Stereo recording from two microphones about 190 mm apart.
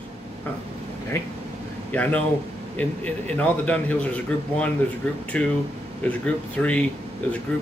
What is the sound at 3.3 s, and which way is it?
A man's voice, 5° left (ahead or behind).